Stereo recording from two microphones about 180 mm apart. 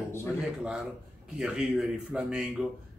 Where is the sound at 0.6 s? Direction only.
5° right (ahead or behind).